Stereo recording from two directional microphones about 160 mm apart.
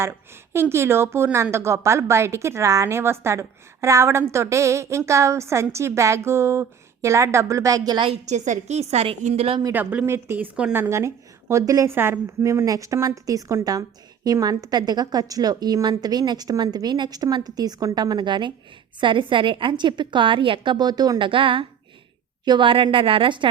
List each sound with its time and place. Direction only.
0.5 s a woman's voice: 15° right (ahead or behind); by 8.2 s 30° right (ahead or behind)
8.3 s a woman's voice: 45° right (ahead or behind)
9.7 s a woman's voice: 10° right (ahead or behind); by 23.5 s 30° right (ahead or behind)